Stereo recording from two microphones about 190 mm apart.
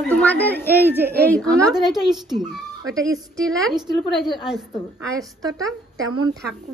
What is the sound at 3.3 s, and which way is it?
Speech, 5° left (ahead or behind).